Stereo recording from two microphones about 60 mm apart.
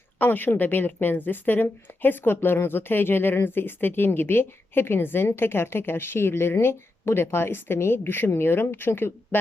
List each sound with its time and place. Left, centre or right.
0.2 s a woman's voice: left